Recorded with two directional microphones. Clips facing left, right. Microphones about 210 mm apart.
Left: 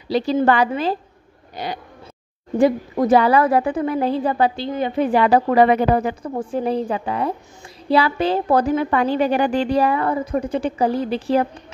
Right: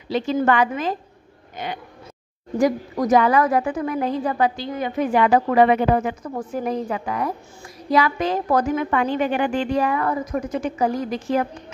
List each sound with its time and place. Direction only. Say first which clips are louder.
0.1 s a woman's voice: left 2 dB; 35° left (ahead or behind)